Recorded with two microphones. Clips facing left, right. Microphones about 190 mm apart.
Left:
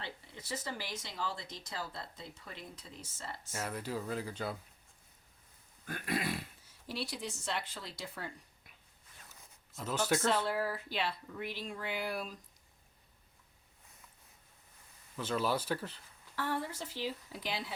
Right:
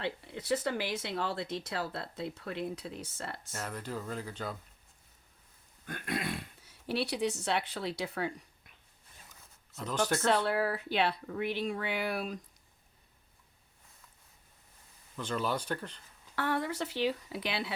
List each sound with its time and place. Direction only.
0.0 s speech: 65° right (ahead or behind)
3.5 s speech: 10° left (ahead or behind)
5.8 s a sound: 5° left (ahead or behind)
6.7 s speech: 65° right (ahead or behind)
9.8 s speech: 5° left (ahead or behind)
10.2 s speech: 70° right (ahead or behind)
15.1 s speech: 5° left (ahead or behind)
16.3 s speech: 70° right (ahead or behind)